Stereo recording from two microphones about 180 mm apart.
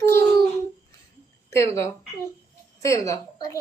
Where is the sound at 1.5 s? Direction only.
15° left (ahead or behind).